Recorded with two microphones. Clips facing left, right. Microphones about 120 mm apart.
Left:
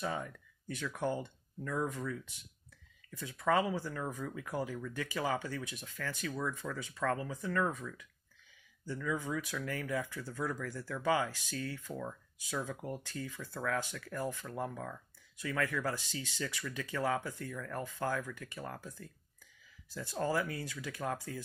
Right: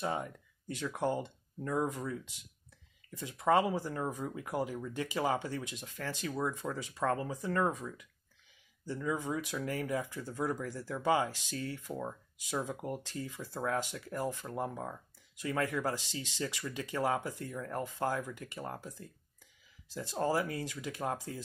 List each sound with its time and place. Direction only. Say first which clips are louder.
0.0 s speech: right 2 dB; 25° right (ahead or behind)
3.1 s speech: right 3 dB; 20° right (ahead or behind)
6.9 s speech: right 2 dB; 35° right (ahead or behind)
7.7 s speech: right 2 dB; 20° right (ahead or behind)
8.8 s speech: right 2 dB; 35° right (ahead or behind)
9.1 s speech: right 1 dB; 25° right (ahead or behind)